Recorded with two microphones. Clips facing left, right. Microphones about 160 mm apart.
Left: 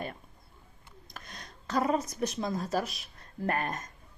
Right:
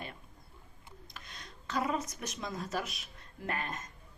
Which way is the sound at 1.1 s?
45° left (ahead or behind).